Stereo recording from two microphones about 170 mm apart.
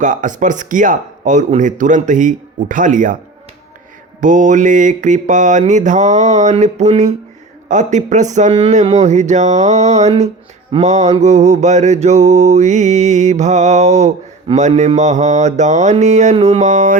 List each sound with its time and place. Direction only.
0.0 s mantra: 50° right (ahead or behind)
4.2 s mantra: 50° right (ahead or behind)